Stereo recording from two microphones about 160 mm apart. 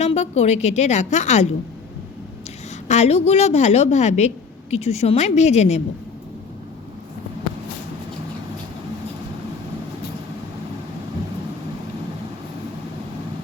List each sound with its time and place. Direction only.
0.0 s a woman's voice: 45° left (ahead or behind)
2.8 s a woman's voice: 45° left (ahead or behind)